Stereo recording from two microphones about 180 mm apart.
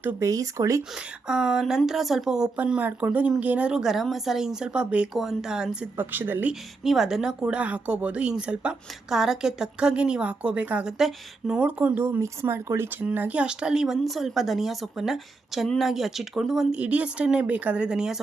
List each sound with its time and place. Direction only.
0.0 s speech: 15° right (ahead or behind)
1.3 s speech: 5° right (ahead or behind)